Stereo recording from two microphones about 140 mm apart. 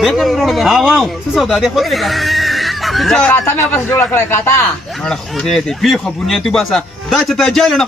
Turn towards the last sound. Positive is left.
turn(degrees=0)  # may be behind; listen again after turning